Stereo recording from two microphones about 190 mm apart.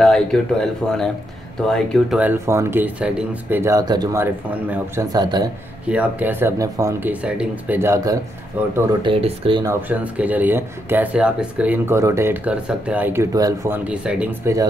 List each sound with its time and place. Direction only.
0.0 s speech: 5° left (ahead or behind); by 5.5 s 20° right (ahead or behind)
5.9 s speech: 10° right (ahead or behind)
9.0 s speech: 30° right (ahead or behind)
9.7 s speech: 10° right (ahead or behind)
13.8 s speech: 5° right (ahead or behind)